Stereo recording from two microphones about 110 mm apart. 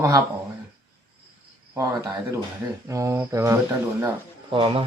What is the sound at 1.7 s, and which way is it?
Speech, 30° right (ahead or behind).